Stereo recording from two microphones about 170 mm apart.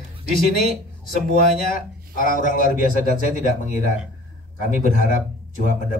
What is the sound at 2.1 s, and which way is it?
Speech, 50° left (ahead or behind).